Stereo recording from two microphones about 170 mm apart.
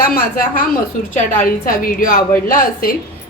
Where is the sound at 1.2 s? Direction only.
55° left (ahead or behind).